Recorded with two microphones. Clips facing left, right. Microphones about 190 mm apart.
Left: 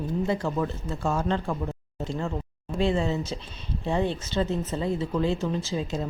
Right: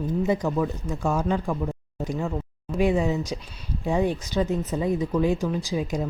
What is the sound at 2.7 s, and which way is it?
A woman's voice, 15° right (ahead or behind).